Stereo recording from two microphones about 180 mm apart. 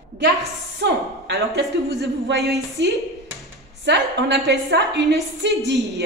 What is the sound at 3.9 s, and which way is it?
A woman's voice, 70° right (ahead or behind).